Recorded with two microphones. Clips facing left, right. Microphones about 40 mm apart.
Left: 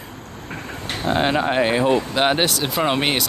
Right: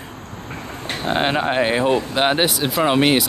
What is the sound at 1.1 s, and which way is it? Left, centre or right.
Speech, right.